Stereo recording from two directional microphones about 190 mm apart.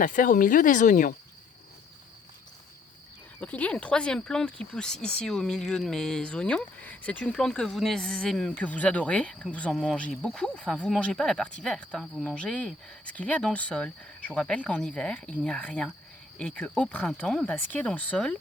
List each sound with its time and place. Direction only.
0.0 s speech: 45° left (ahead or behind)
3.4 s speech: 5° left (ahead or behind)